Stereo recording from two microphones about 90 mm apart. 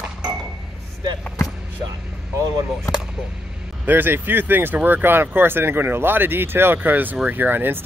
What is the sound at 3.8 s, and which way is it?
Speech, 20° right (ahead or behind).